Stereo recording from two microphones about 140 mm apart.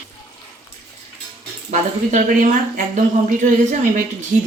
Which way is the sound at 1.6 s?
65° right (ahead or behind).